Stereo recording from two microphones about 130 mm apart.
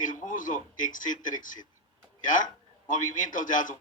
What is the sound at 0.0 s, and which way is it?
A man's voice, 90° left.